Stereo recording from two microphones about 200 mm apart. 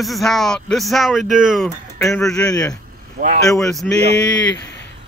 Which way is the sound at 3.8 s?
5° left (ahead or behind).